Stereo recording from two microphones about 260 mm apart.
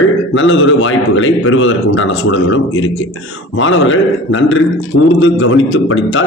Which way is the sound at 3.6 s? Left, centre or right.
Left.